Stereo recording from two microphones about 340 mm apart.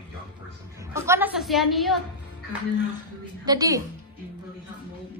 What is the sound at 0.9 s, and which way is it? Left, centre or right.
A woman's voice, centre.